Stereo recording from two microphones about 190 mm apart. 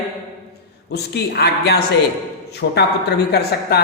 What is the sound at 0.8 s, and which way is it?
A man's voice, 60° left (ahead or behind).